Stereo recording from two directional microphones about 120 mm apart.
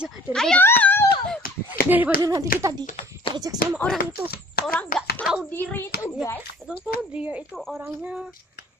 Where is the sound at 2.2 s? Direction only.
30° right (ahead or behind).